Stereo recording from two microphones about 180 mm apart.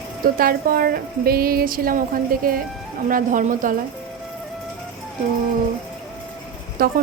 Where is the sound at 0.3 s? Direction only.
55° right (ahead or behind).